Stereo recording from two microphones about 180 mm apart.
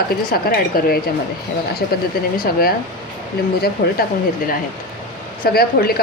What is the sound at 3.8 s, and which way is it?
Speech, 60° left (ahead or behind).